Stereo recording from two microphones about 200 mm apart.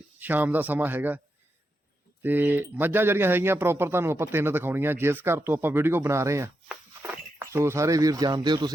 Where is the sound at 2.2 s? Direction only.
10° right (ahead or behind).